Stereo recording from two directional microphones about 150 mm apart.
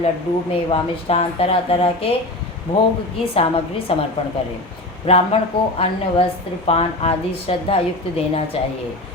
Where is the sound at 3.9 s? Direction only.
40° left (ahead or behind).